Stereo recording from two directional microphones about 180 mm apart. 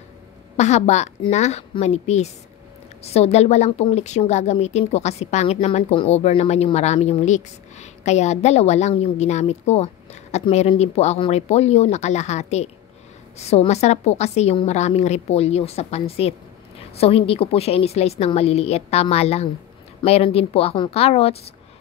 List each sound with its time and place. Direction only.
0.6 s a woman's voice: 40° left (ahead or behind)